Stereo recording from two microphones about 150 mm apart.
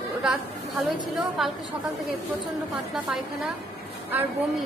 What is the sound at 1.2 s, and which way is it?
Speech, centre (ahead or behind).